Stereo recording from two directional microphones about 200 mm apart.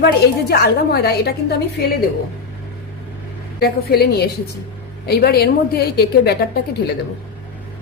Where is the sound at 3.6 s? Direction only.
50° left (ahead or behind).